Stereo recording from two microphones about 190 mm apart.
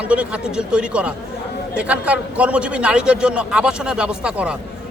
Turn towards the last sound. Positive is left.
turn(degrees=-5)  # may be behind; listen again after turning